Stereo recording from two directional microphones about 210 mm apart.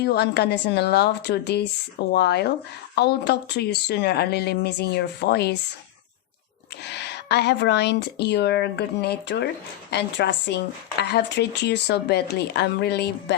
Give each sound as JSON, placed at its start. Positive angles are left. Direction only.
{"t": 0.0, "sound": "speech", "side_deg": 50}
{"t": 6.8, "sound": "speech", "side_deg": 55}